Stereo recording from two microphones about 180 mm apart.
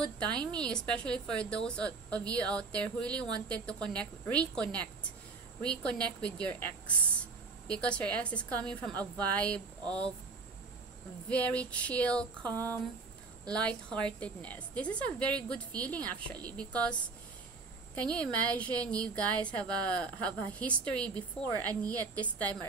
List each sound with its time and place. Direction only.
0.0 s a woman's voice: 5° left (ahead or behind)
11.2 s a woman's voice: 5° left (ahead or behind)
12.4 s a sound: 20° right (ahead or behind)
13.5 s a woman's voice: 5° left (ahead or behind)
18.2 s a woman's voice: 5° left (ahead or behind)